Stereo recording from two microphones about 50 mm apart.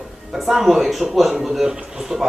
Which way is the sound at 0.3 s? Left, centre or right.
Centre.